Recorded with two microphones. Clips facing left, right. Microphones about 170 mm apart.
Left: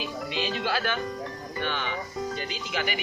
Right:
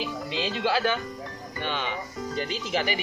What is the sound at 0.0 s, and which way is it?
Speech, 30° right (ahead or behind).